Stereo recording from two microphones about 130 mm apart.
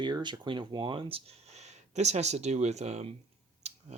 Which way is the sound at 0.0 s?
35° right (ahead or behind).